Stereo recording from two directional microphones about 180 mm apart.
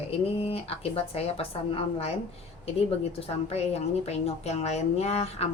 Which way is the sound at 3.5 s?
35° left (ahead or behind).